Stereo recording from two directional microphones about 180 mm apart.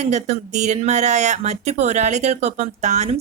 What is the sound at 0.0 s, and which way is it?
Speech, 40° right (ahead or behind).